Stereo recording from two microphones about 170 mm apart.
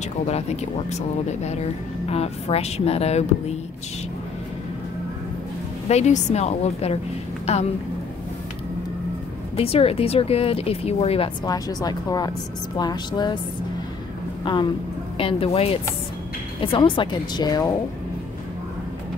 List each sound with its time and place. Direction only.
0.3 s speech: 40° left (ahead or behind)
5.9 s speech: 40° left (ahead or behind)
9.6 s speech: 35° left (ahead or behind)
11.4 s speech: 20° left (ahead or behind)
14.4 s a woman's voice: 25° left (ahead or behind)